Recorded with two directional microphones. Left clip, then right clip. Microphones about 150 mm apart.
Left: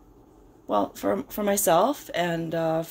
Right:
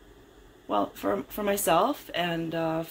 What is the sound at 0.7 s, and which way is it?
Speech, 30° left (ahead or behind).